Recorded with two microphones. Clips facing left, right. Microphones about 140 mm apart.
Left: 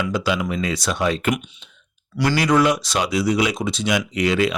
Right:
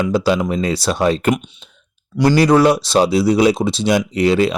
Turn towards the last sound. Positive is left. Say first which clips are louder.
# right 5 dB
turn(degrees=-30)  # may be behind; listen again after turning